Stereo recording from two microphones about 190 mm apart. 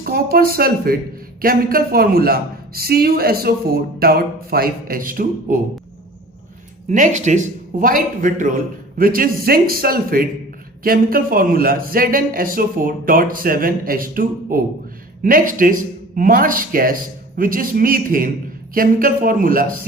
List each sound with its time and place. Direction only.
0.0 s speech: 50° right (ahead or behind)
6.8 s speech: 40° right (ahead or behind)